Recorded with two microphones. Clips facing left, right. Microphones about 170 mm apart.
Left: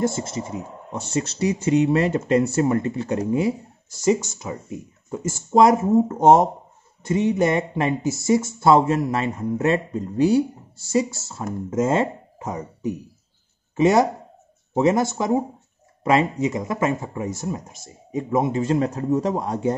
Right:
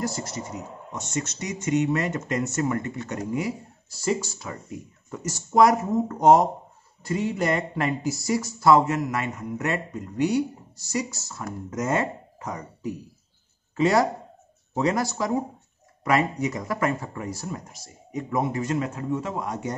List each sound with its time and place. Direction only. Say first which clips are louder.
0.0 s speech: left 6 dB; 25° left (ahead or behind)